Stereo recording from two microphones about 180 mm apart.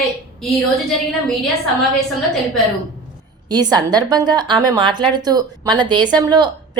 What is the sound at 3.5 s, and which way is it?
A woman's voice, 25° right (ahead or behind).